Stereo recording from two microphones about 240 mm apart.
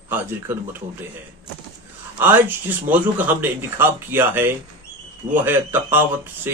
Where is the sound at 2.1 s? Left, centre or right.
Centre.